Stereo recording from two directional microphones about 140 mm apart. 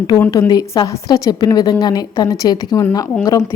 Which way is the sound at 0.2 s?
25° left (ahead or behind).